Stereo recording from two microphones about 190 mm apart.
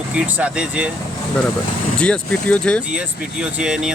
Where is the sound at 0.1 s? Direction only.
5° right (ahead or behind).